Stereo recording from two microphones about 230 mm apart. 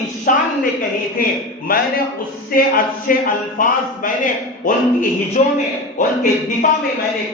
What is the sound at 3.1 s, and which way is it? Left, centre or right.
A man's voice, left.